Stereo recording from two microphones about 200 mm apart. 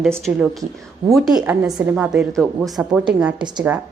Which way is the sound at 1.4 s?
5° right (ahead or behind).